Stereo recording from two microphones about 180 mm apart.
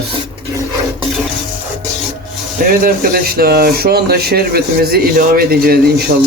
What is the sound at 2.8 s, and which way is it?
Speech, 60° right (ahead or behind).